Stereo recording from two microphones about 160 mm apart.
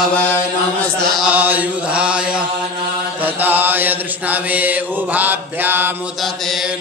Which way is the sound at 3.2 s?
10° right (ahead or behind).